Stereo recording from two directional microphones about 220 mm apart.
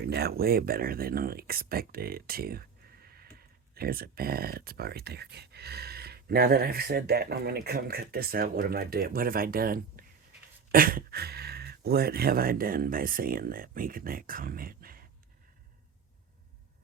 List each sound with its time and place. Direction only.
0.0 s speech: 45° right (ahead or behind)